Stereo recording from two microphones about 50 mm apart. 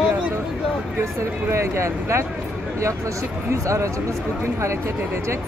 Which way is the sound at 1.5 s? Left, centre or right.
Right.